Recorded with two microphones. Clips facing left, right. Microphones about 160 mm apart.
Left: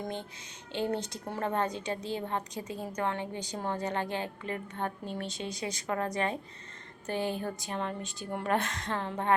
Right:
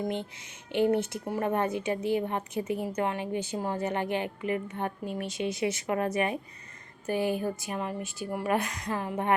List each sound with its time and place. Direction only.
0.7 s a woman's voice: 15° right (ahead or behind)
5.5 s a woman's voice: 20° right (ahead or behind)